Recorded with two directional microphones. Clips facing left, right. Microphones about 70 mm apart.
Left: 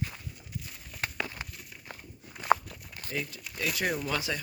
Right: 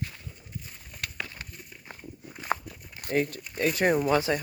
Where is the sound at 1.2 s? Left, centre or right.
Centre.